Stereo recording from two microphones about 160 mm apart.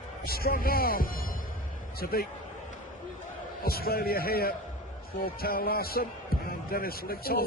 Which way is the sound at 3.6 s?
70° left (ahead or behind).